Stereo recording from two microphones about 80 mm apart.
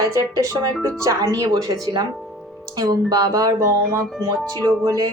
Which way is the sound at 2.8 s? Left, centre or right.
Right.